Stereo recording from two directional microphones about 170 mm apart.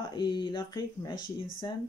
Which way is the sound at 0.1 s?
25° left (ahead or behind).